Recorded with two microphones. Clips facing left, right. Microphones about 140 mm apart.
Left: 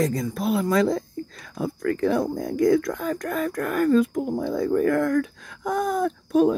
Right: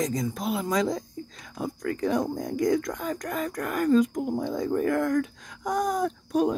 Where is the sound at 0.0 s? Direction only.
20° right (ahead or behind).